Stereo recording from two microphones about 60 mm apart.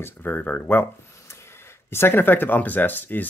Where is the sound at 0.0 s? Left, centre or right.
Left.